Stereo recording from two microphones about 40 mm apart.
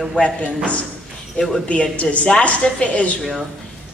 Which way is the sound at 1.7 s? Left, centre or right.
Left.